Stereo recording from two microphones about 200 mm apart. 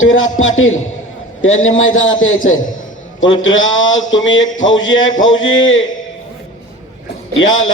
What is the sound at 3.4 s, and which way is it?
A man's voice, 75° left (ahead or behind).